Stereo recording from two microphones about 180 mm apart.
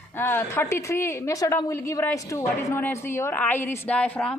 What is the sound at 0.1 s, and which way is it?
Speech, 10° left (ahead or behind).